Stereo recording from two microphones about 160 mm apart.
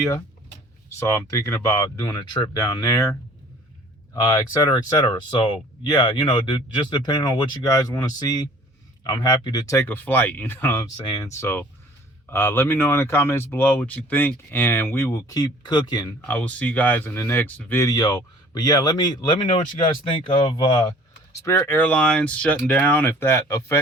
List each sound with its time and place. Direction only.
0.9 s speech: 20° left (ahead or behind)
16.2 s speech: 10° left (ahead or behind); by 20.9 s 30° left (ahead or behind)
21.4 s speech: 15° left (ahead or behind)